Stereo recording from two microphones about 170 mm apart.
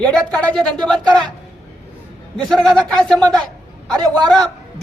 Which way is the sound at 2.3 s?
5° left (ahead or behind).